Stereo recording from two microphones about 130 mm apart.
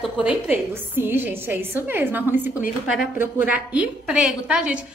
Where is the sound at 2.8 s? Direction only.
5° right (ahead or behind).